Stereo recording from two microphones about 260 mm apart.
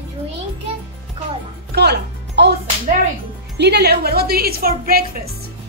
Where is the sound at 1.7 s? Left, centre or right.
Right.